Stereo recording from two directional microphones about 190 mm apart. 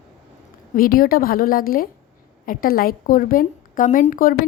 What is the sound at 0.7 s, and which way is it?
A woman's voice, 50° left (ahead or behind).